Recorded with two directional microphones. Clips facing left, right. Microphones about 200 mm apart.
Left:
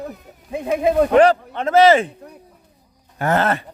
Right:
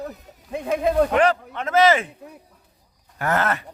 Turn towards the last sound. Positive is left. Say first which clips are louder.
# left 4 dB
turn(degrees=30)  # may be behind; listen again after turning